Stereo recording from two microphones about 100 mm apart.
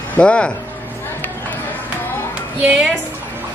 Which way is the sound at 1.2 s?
20° left (ahead or behind).